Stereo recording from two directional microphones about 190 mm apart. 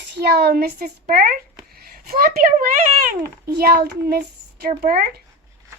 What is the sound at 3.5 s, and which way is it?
Speech, 55° right (ahead or behind).